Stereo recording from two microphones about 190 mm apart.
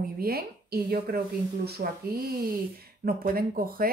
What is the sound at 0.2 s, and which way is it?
Speech, 55° right (ahead or behind).